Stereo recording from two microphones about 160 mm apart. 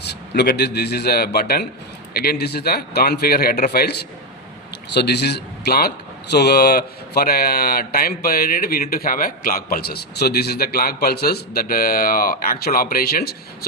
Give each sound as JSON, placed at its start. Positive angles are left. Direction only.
{"t": 0.0, "sound": "a man's voice", "side_deg": 90}